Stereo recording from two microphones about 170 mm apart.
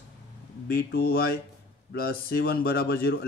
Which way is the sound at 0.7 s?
65° left (ahead or behind).